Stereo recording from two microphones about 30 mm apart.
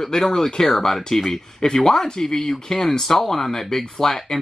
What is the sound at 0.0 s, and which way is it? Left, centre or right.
Speech, centre.